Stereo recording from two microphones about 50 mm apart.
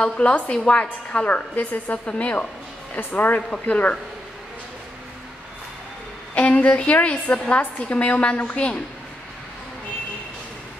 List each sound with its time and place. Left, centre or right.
0.2 s a woman's voice: left
3.0 s a woman's voice: left
6.3 s a woman's voice: left